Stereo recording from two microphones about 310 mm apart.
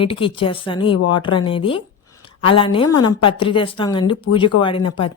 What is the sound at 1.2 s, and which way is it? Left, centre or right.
Speech, centre.